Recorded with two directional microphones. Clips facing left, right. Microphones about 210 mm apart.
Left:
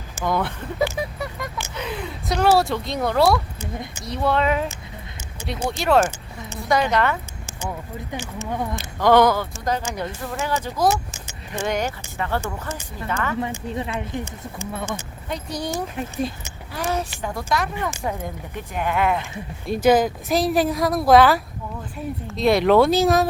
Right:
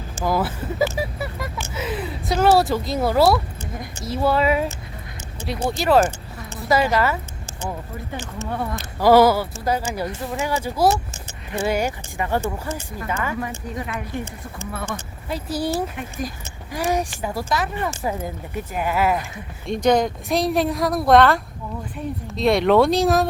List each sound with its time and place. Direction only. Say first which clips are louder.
0.3 s speech: right 1 dB; 5° right (ahead or behind)
1.7 s a sound: right 5 dB; 5° right (ahead or behind)
4.0 s speech: right 2 dB; 5° right (ahead or behind)
9.0 s speech: right 2 dB; 5° right (ahead or behind)
13.4 s speech: left 2 dB; 25° left (ahead or behind)
15.3 s speech: right 3 dB; 5° right (ahead or behind)